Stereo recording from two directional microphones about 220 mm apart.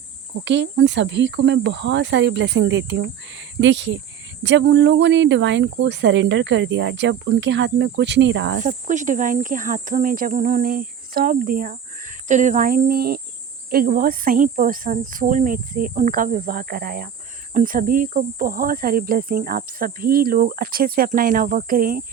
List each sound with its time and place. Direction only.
0.4 s speech: 55° right (ahead or behind)
8.5 s speech: 35° right (ahead or behind)